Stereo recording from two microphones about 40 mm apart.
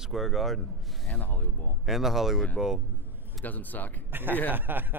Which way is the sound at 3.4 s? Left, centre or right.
Left.